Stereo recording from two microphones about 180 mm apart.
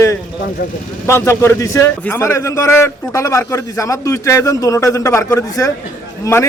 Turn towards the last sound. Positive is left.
turn(degrees=15)  # may be behind; listen again after turning